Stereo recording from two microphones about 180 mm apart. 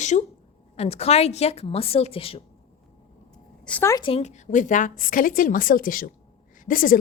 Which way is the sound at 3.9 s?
30° left (ahead or behind).